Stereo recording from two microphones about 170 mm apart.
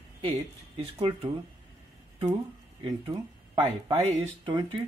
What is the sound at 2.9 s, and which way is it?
Speech, 25° right (ahead or behind).